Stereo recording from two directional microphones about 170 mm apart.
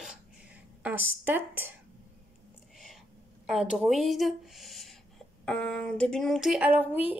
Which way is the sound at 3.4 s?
5° right (ahead or behind).